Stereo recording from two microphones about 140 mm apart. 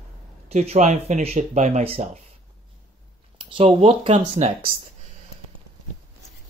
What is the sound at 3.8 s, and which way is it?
Speech, 40° right (ahead or behind).